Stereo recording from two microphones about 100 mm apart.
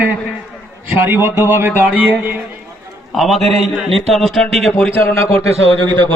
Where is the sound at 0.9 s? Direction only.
20° right (ahead or behind).